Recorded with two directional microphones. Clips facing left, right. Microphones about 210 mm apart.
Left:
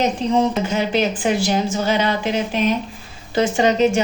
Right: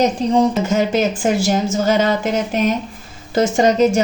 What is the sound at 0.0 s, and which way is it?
A woman's voice, 40° right (ahead or behind).